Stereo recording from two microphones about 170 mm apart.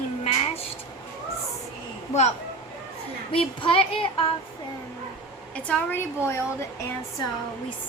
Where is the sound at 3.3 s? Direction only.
30° left (ahead or behind).